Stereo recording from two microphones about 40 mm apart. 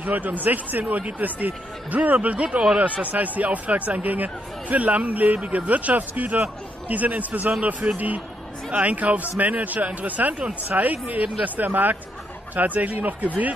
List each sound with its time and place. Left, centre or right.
0.0 s speech: right